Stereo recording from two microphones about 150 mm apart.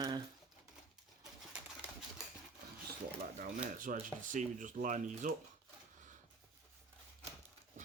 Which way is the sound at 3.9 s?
65° right (ahead or behind).